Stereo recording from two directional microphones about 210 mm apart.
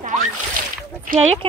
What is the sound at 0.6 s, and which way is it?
Splash, 40° right (ahead or behind).